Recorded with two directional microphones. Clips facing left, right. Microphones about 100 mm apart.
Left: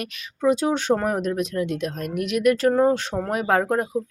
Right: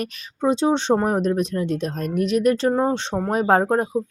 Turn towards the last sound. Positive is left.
turn(degrees=-30)  # may be behind; listen again after turning